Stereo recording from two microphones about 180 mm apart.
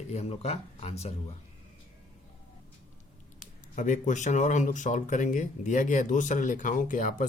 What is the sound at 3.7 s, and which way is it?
Speech, 45° left (ahead or behind).